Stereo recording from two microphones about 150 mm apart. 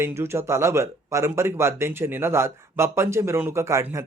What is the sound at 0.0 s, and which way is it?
Speech, 15° right (ahead or behind).